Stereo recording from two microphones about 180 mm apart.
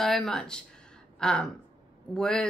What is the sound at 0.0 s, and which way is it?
Speech, centre (ahead or behind).